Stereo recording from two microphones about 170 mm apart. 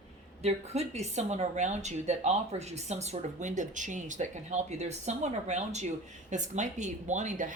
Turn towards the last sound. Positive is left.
turn(degrees=-45)  # may be behind; listen again after turning